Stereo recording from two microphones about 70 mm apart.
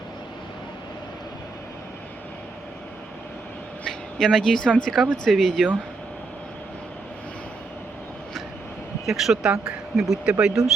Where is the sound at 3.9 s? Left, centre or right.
Centre.